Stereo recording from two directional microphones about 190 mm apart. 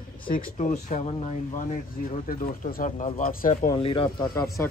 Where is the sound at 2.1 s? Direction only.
45° left (ahead or behind).